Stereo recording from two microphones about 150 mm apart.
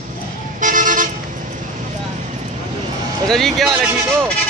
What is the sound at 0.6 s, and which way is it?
Vehicle, 60° right (ahead or behind).